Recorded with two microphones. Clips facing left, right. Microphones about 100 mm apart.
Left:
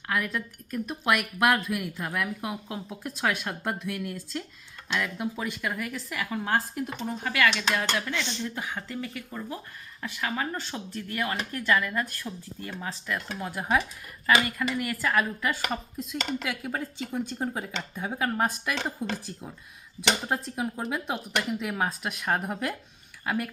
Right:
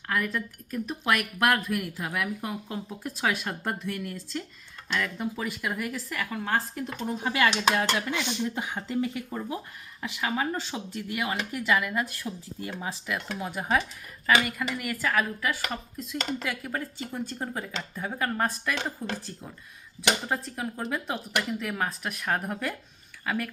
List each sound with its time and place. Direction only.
0.1 s speech: centre (ahead or behind)
7.2 s speech: 25° right (ahead or behind)
13.1 s speech: centre (ahead or behind)
16.6 s speech: 15° left (ahead or behind)
20.2 s speech: 5° left (ahead or behind)